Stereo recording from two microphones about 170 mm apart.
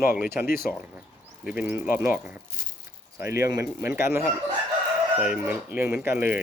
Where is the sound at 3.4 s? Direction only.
15° right (ahead or behind).